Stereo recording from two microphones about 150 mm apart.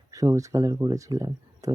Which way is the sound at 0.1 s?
20° right (ahead or behind).